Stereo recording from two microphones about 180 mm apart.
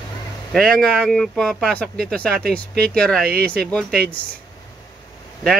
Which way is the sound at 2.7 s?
60° right (ahead or behind).